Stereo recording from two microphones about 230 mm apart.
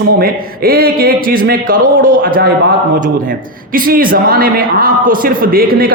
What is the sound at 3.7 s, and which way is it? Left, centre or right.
A man's voice, right.